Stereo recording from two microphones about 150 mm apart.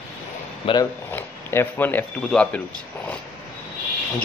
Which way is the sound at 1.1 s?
15° left (ahead or behind).